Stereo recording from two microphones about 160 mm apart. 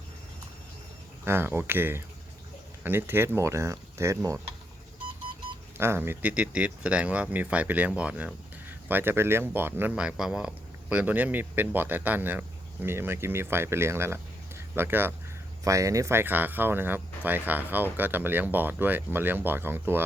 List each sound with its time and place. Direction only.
1.2 s speech: 15° right (ahead or behind)
5.7 s speech: 15° right (ahead or behind)